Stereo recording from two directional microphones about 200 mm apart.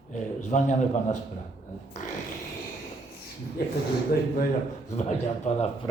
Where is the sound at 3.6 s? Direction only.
50° left (ahead or behind).